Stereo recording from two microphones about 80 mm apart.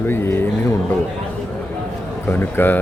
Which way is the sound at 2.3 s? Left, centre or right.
Left.